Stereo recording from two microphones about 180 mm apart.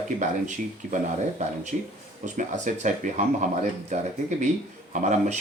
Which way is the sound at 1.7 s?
45° right (ahead or behind).